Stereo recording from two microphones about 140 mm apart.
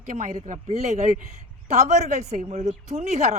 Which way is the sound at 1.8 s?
55° right (ahead or behind).